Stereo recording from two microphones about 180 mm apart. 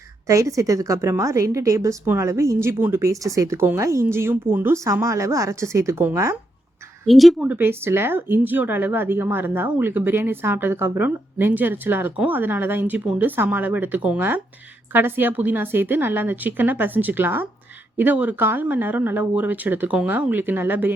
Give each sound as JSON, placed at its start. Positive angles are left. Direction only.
{"t": 0.3, "sound": "speech", "side_deg": -15}
{"t": 7.1, "sound": "speech", "side_deg": 0}